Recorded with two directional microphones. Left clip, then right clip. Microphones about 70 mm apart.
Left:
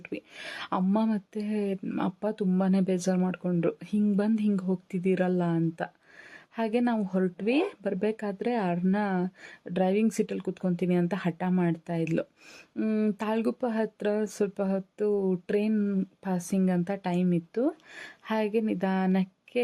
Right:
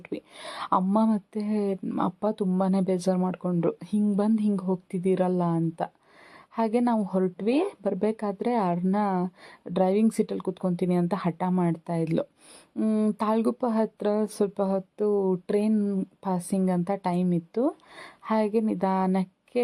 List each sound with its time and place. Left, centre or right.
0.0 s whispering: right
0.9 s speech: right
12.7 s speech: centre
13.1 s speech: right
15.7 s speech: centre
16.2 s speech: right